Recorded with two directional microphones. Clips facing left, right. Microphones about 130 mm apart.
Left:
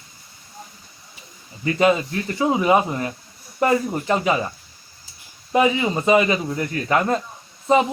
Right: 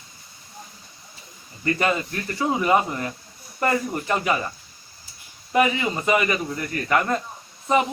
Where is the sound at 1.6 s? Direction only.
15° left (ahead or behind).